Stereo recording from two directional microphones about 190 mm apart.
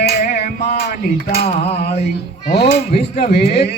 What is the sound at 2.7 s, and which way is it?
Speech, 60° left (ahead or behind).